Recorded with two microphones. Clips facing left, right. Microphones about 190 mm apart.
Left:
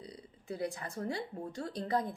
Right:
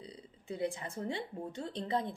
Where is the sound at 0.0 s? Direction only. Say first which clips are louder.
Left 1 dB; 25° right (ahead or behind).